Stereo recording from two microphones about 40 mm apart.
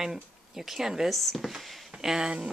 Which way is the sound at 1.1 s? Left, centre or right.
Centre.